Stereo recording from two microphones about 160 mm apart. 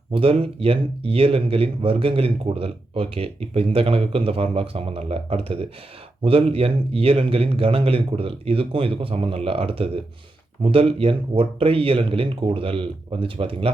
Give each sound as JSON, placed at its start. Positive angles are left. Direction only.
{"t": 0.1, "sound": "speech", "side_deg": -35}